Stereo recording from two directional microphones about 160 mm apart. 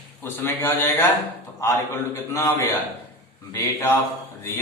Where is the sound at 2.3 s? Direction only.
20° left (ahead or behind).